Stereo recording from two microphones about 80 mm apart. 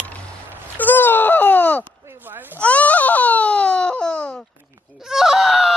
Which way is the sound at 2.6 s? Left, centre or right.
Centre.